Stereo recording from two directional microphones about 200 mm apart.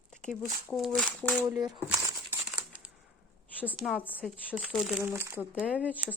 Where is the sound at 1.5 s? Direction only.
15° right (ahead or behind).